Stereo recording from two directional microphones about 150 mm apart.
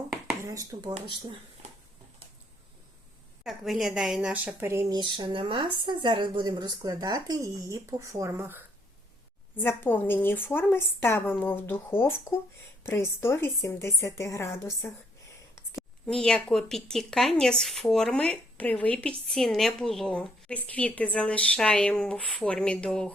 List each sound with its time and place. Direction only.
0.4 s speech: 20° right (ahead or behind)
3.4 s speech: centre (ahead or behind)
4.6 s speech: 20° right (ahead or behind)
4.9 s speech: 30° right (ahead or behind); by 8.6 s 15° right (ahead or behind)
9.6 s a woman's voice: 15° left (ahead or behind)
16.0 s a woman's voice: 5° left (ahead or behind)